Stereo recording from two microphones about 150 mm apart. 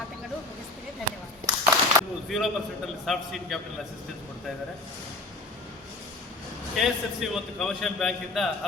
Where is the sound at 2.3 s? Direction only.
Centre (ahead or behind).